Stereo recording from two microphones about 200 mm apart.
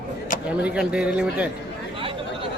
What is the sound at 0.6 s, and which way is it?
Speech, 5° right (ahead or behind).